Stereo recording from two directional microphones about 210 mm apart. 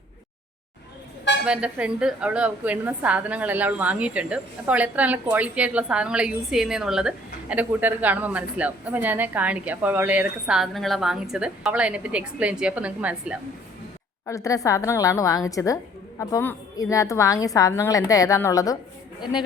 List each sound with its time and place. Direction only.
1.5 s a woman's voice: 5° right (ahead or behind)
14.3 s a woman's voice: 15° left (ahead or behind)